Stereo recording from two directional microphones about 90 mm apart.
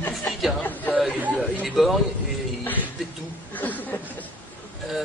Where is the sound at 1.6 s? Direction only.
Centre (ahead or behind).